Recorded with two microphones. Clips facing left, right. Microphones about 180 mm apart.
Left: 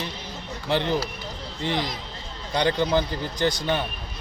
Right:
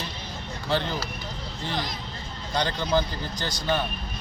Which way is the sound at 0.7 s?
20° left (ahead or behind).